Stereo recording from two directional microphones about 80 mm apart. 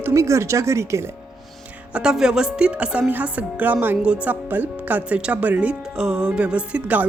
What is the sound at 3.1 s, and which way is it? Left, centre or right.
Music, right.